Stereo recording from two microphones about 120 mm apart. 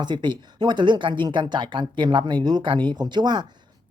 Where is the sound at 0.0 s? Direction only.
40° right (ahead or behind).